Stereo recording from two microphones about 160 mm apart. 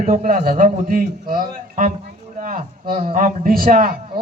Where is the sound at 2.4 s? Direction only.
55° right (ahead or behind).